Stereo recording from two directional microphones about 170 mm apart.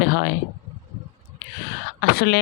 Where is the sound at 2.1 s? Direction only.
65° left (ahead or behind).